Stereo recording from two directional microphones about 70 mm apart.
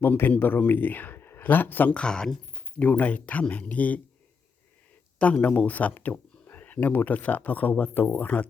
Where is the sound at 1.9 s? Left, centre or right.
Centre.